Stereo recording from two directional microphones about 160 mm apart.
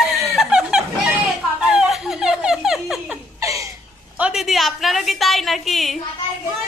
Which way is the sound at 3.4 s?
20° right (ahead or behind).